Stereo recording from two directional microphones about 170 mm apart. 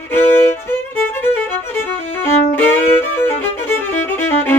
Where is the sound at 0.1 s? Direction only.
15° left (ahead or behind).